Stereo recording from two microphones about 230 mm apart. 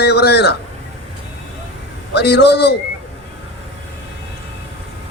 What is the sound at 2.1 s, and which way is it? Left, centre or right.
Speech, left.